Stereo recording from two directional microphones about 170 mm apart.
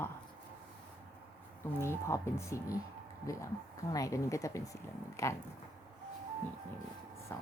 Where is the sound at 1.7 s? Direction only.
15° left (ahead or behind).